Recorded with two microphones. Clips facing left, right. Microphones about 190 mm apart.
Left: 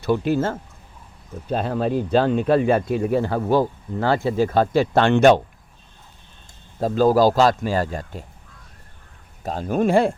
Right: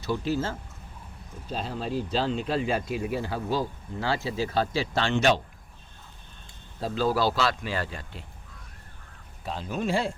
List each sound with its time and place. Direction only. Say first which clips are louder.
0.0 s speech: left 8 dB; 55° left (ahead or behind)
6.7 s a man's voice: left 9 dB; 45° left (ahead or behind)
9.4 s a man's voice: left 9 dB; 45° left (ahead or behind)